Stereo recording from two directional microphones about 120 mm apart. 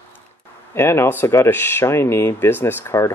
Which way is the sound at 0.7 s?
20° left (ahead or behind).